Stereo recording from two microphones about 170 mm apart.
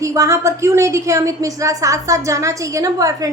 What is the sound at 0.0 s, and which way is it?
A woman's voice, 20° right (ahead or behind).